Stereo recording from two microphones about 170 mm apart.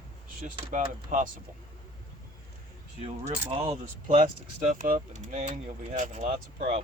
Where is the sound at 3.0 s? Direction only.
35° right (ahead or behind).